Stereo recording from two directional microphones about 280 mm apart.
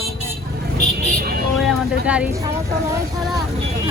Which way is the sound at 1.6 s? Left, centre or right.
Centre.